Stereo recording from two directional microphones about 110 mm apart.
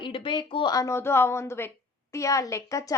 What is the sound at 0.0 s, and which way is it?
A woman's voice, 45° left (ahead or behind).